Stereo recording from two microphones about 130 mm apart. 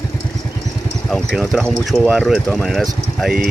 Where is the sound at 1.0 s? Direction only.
Centre (ahead or behind).